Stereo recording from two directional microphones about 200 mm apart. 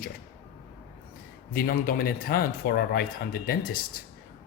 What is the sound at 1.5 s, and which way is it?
Speech, 45° left (ahead or behind).